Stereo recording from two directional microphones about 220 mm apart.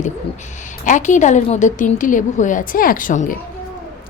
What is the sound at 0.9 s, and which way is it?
Speech, 35° left (ahead or behind).